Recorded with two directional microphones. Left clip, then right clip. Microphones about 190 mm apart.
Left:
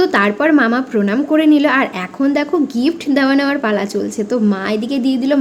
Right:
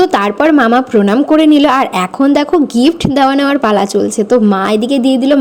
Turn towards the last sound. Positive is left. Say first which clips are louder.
# right 6 dB
turn(degrees=-30)  # may be behind; listen again after turning